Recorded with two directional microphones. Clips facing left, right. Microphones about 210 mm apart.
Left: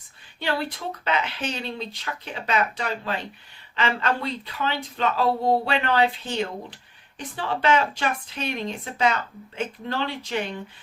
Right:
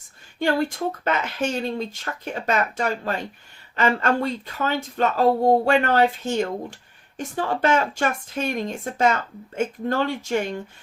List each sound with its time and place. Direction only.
0.3 s speech: 45° right (ahead or behind)